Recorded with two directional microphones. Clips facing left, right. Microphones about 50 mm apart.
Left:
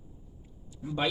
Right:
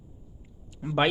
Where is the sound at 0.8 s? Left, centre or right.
Right.